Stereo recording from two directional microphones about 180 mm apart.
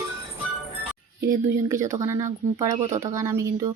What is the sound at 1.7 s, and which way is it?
Speech, 15° right (ahead or behind).